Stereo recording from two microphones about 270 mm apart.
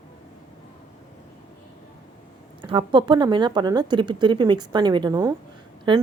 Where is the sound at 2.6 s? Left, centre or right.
Centre.